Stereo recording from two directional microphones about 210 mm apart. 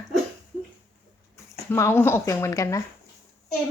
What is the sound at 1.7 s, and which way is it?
Speech, 10° left (ahead or behind).